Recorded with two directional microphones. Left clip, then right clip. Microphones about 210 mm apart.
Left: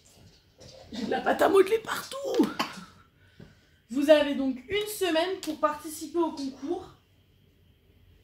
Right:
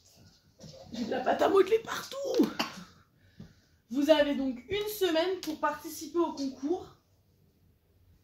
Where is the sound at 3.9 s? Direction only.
15° left (ahead or behind).